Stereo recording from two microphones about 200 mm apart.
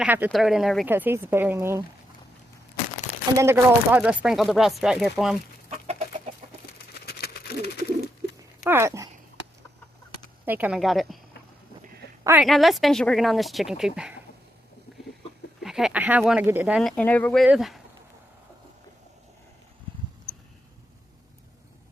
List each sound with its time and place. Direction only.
0.0 s speech: 10° right (ahead or behind)
3.3 s speech: 10° right (ahead or behind)
6.9 s bird: 50° left (ahead or behind)
8.6 s speech: 15° right (ahead or behind)
10.4 s speech: 10° right (ahead or behind)
12.2 s a woman's voice: 10° right (ahead or behind)
12.5 s speech: centre (ahead or behind)
15.6 s speech: centre (ahead or behind)
16.9 s speech: 10° left (ahead or behind)